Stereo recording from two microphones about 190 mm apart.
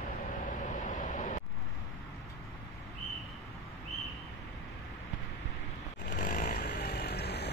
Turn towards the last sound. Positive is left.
turn(degrees=60)  # may be behind; listen again after turning